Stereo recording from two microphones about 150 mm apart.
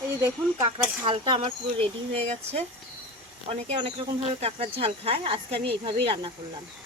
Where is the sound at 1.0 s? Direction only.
35° right (ahead or behind).